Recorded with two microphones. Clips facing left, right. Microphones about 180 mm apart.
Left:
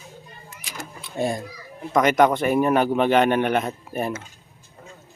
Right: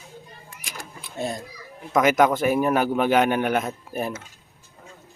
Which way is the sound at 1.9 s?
5° right (ahead or behind).